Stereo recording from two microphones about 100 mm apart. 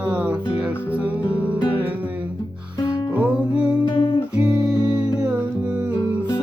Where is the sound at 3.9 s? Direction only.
55° left (ahead or behind).